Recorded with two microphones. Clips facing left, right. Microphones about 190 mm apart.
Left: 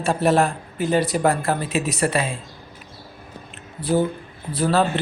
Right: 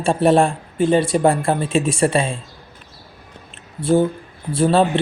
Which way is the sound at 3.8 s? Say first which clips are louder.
Right 4 dB; 25° right (ahead or behind).